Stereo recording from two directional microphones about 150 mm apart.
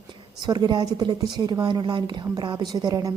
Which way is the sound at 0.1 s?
25° right (ahead or behind).